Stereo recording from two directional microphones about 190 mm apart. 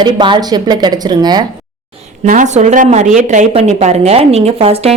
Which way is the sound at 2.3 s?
40° right (ahead or behind).